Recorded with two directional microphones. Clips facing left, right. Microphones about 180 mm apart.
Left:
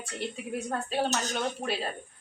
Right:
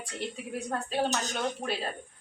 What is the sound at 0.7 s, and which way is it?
Speech, 10° left (ahead or behind).